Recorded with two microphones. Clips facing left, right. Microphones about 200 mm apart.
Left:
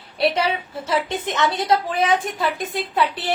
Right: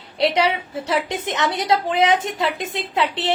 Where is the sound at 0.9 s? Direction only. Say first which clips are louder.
Left 1 dB; 20° right (ahead or behind).